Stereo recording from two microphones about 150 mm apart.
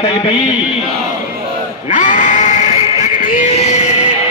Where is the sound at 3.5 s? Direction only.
45° left (ahead or behind).